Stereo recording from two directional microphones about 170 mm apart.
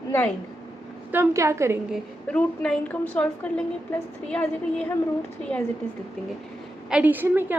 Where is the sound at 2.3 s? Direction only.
10° left (ahead or behind).